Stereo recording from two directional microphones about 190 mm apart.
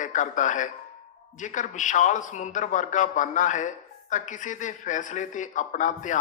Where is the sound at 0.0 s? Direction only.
40° left (ahead or behind).